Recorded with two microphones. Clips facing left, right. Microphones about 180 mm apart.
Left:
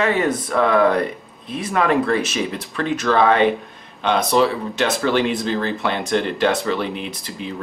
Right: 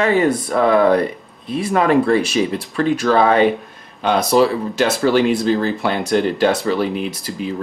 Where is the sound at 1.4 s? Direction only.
35° right (ahead or behind).